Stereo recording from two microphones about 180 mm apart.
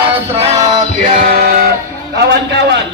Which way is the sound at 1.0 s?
50° right (ahead or behind).